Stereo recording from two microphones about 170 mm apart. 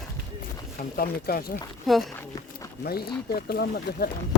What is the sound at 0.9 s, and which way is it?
Speech, 60° left (ahead or behind).